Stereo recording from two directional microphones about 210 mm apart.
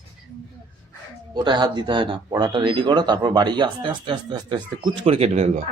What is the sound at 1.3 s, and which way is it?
Speech, 20° right (ahead or behind).